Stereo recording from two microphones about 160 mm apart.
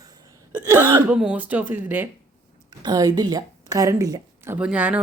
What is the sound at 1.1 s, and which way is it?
Speech, 5° right (ahead or behind).